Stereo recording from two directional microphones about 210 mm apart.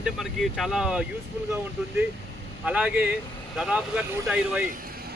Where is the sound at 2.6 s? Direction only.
5° right (ahead or behind).